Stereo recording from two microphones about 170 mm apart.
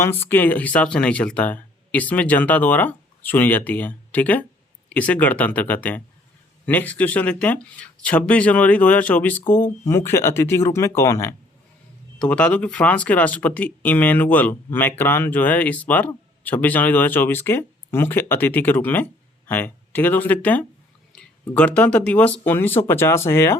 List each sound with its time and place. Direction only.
0.0 s speech: 15° left (ahead or behind)